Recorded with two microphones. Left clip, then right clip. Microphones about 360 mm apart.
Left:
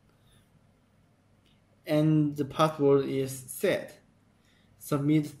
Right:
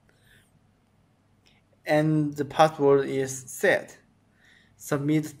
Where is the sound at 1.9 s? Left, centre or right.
Centre.